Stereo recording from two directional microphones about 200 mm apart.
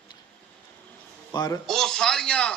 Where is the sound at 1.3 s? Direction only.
20° left (ahead or behind).